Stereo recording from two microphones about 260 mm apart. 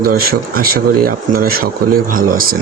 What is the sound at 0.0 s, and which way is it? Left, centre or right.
Speech, right.